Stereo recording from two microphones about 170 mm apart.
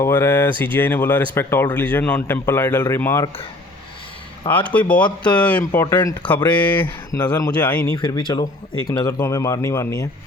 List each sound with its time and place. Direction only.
0.0 s speech: 15° left (ahead or behind)
4.7 s speech: 10° left (ahead or behind)
6.8 s speech: 25° left (ahead or behind)
7.6 s speech: 10° left (ahead or behind)
7.9 s speech: 25° left (ahead or behind)